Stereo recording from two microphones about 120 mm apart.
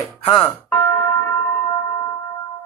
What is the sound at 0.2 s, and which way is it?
Speech, 45° left (ahead or behind).